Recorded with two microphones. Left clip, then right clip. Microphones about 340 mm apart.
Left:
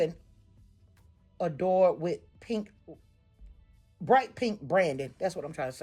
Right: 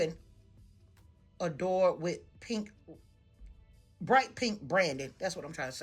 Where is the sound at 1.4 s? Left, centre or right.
Centre.